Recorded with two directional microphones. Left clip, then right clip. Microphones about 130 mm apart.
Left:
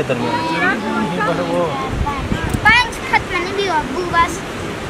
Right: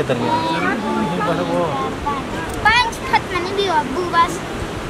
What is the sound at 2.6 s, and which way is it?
Vehicle, centre (ahead or behind).